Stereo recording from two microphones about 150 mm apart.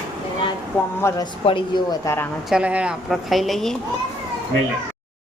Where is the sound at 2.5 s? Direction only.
5° right (ahead or behind).